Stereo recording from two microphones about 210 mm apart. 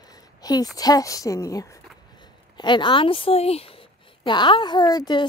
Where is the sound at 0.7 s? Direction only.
15° left (ahead or behind).